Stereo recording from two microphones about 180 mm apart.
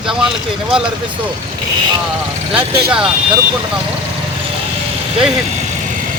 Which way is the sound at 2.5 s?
5° right (ahead or behind).